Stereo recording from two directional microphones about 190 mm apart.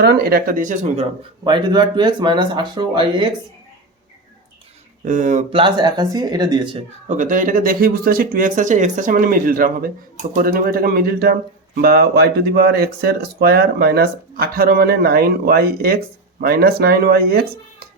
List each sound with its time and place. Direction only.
0.0 s speech: 55° right (ahead or behind); by 1.0 s 40° right (ahead or behind)
1.5 s speech: 25° right (ahead or behind)
5.0 s speech: 40° right (ahead or behind)
5.5 s speech: 25° right (ahead or behind)
7.1 s speech: 40° right (ahead or behind)